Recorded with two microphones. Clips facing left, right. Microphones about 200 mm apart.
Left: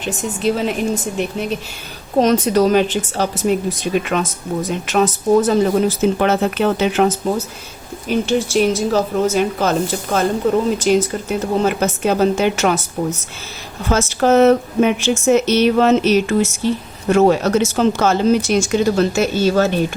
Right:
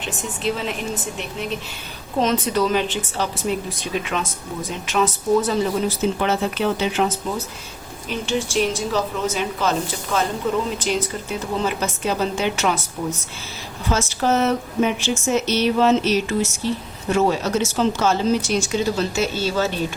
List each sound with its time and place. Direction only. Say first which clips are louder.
0.4 s speech: left 7 dB; 45° left (ahead or behind)
2.1 s speech: left 6 dB; 45° left (ahead or behind)
13.8 s speech: left 5 dB; 55° left (ahead or behind)